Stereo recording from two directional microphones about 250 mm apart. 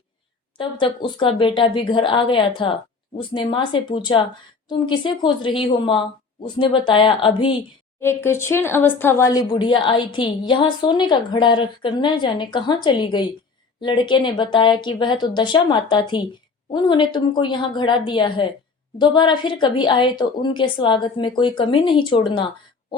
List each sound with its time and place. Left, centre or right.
0.6 s a woman's voice: centre
8.0 s a woman's voice: centre